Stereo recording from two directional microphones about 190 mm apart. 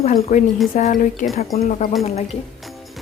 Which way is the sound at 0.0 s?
40° left (ahead or behind).